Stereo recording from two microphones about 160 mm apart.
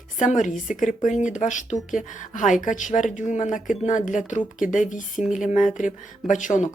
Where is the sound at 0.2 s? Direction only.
50° left (ahead or behind).